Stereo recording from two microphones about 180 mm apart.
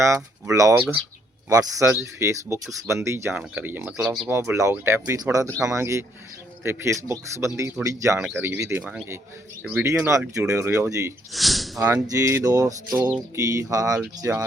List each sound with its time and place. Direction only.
0.0 s speech: 15° right (ahead or behind)
9.8 s speech: 15° right (ahead or behind)
11.3 s snort: centre (ahead or behind)
11.8 s speech: 15° right (ahead or behind)